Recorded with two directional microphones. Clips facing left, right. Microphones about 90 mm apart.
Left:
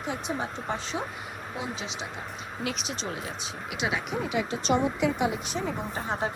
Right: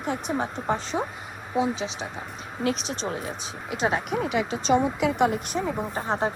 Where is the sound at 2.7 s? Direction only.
35° right (ahead or behind).